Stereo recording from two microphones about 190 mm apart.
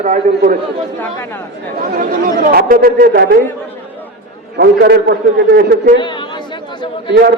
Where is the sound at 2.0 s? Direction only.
50° right (ahead or behind).